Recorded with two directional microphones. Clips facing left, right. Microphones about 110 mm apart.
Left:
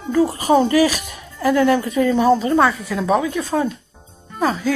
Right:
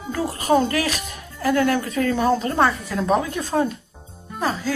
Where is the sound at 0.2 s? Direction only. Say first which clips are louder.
Left 4 dB; 10° left (ahead or behind).